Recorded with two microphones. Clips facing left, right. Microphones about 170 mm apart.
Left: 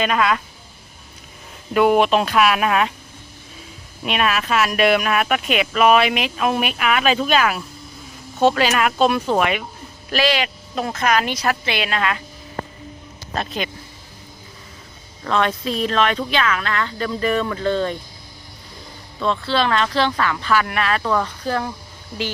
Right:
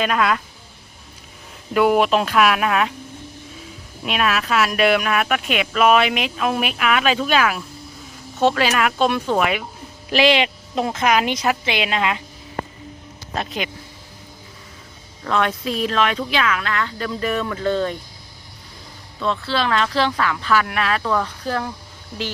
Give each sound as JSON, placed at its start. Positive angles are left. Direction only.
{"t": 0.0, "sound": "speech", "side_deg": 0}
{"t": 1.7, "sound": "speech", "side_deg": 0}
{"t": 4.0, "sound": "speech", "side_deg": 0}
{"t": 10.1, "sound": "speech", "side_deg": -20}
{"t": 13.3, "sound": "speech", "side_deg": -15}
{"t": 15.2, "sound": "speech", "side_deg": -5}
{"t": 19.3, "sound": "speech", "side_deg": -5}